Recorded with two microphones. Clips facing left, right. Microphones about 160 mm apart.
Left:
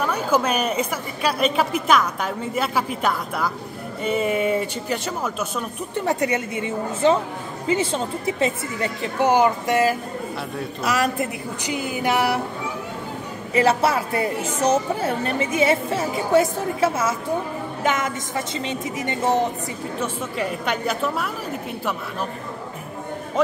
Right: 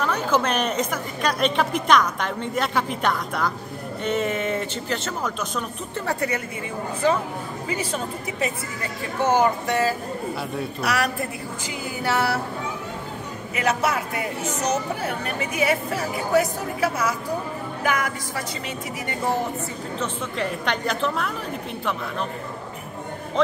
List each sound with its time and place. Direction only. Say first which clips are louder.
0.0 s a woman's voice: left 1 dB; 10° left (ahead or behind)
6.3 s speech: left 4 dB; 25° left (ahead or behind)
9.2 s a woman's voice: left 2 dB; 15° left (ahead or behind)
13.6 s speech: left 5 dB; 30° left (ahead or behind)
20.0 s a woman's voice: left 1 dB; 5° left (ahead or behind)